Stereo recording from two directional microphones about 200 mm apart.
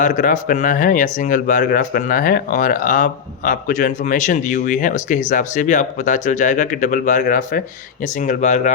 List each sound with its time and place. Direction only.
0.0 s speech: 40° left (ahead or behind)